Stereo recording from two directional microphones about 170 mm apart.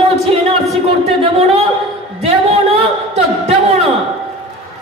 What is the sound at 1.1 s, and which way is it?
A man's voice, 35° right (ahead or behind).